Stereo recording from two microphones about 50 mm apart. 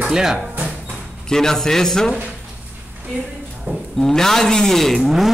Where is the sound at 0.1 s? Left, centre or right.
Centre.